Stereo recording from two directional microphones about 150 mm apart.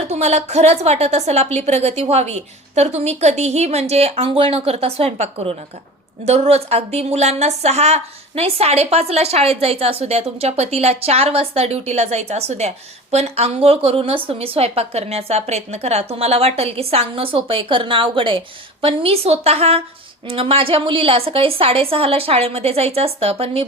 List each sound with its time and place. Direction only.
0.1 s a woman's voice: 50° right (ahead or behind)